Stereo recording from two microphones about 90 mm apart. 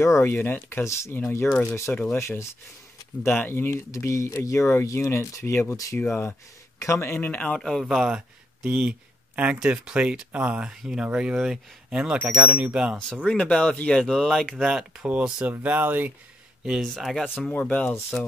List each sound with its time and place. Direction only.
0.0 s speech: 30° left (ahead or behind); by 7.8 s 10° left (ahead or behind)
7.9 s speech: 5° right (ahead or behind)
13.2 s speech: 10° left (ahead or behind)
14.7 s speech: 5° right (ahead or behind)
16.6 s speech: centre (ahead or behind)
17.5 s speech: 15° left (ahead or behind)